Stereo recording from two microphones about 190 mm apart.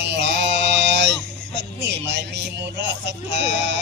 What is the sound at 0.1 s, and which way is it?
Mantra, 65° right (ahead or behind).